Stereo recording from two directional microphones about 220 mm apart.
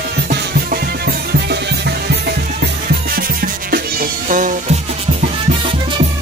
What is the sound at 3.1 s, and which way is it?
Music, 45° right (ahead or behind).